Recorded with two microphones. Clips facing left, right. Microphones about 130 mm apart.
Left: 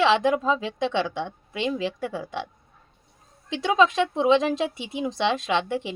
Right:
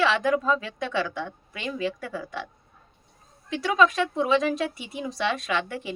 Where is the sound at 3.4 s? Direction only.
25° left (ahead or behind).